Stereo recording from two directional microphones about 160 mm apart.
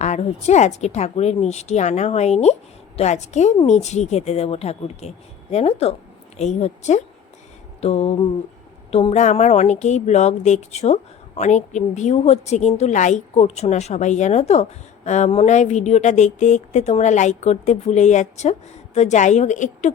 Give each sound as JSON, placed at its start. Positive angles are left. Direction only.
{"t": 0.0, "sound": "a woman's voice", "side_deg": 45}
{"t": 7.8, "sound": "a sound", "side_deg": 40}
{"t": 8.9, "sound": "a woman's voice", "side_deg": 40}